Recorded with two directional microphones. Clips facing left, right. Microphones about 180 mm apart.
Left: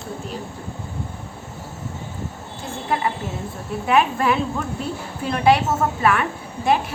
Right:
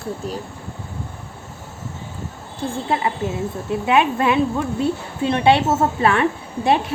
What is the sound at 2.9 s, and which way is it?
A woman's voice, 25° right (ahead or behind).